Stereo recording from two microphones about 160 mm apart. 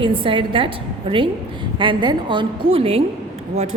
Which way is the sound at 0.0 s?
35° right (ahead or behind).